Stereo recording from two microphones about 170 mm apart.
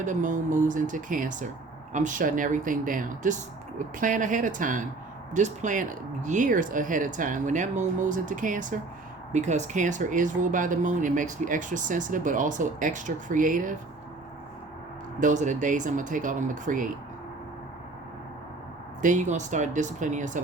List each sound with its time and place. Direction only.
0.0 s speech: 50° right (ahead or behind)
15.2 s speech: 45° right (ahead or behind)
19.0 s speech: 45° right (ahead or behind)